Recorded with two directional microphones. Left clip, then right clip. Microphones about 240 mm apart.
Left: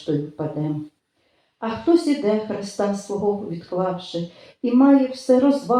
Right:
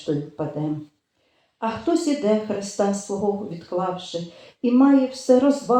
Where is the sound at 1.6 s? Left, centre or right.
Right.